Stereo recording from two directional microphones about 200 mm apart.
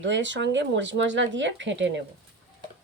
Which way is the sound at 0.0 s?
65° right (ahead or behind).